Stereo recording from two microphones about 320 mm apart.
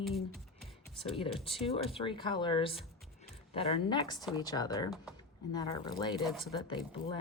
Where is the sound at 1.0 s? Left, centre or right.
Centre.